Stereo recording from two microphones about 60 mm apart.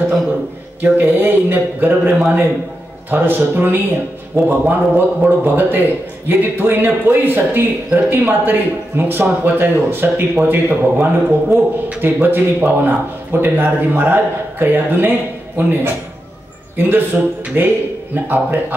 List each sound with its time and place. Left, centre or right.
0.7 s a man's voice: right
17.6 s a man's voice: right